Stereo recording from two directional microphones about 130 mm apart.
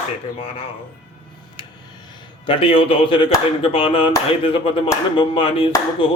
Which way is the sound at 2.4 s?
45° left (ahead or behind).